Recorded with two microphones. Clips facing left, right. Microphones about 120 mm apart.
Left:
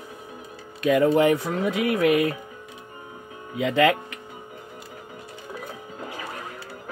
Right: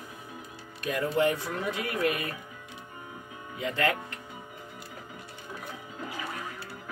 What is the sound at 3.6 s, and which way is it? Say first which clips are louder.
Speech: left 9 dB; 90° left.